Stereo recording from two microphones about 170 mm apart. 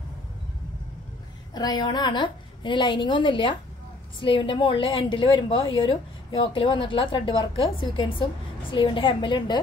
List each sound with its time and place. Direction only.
1.5 s a woman's voice: 25° left (ahead or behind)